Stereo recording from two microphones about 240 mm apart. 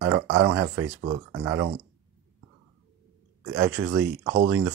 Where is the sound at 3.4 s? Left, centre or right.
Right.